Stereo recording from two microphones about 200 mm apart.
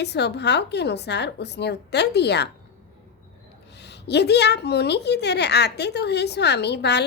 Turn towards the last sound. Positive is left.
turn(degrees=55)  # may be behind; listen again after turning